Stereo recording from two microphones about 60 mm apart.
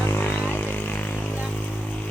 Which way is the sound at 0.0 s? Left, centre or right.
Left.